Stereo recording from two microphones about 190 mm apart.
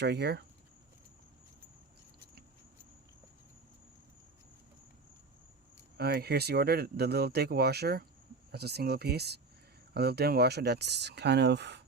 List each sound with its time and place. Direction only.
0.0 s speech: 60° right (ahead or behind)
6.0 s speech: 55° right (ahead or behind)